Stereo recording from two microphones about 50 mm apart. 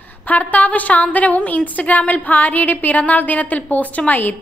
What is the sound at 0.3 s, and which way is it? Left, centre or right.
A woman's voice, left.